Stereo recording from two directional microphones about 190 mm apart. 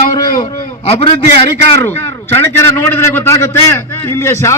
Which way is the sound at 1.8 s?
10° left (ahead or behind).